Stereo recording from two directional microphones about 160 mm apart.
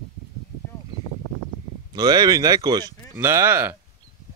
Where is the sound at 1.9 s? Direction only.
25° right (ahead or behind).